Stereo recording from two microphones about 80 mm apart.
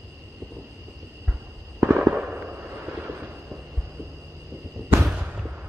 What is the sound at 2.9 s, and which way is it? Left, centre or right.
Vehicle, right.